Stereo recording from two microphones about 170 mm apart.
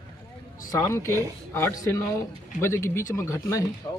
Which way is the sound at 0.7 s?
15° left (ahead or behind).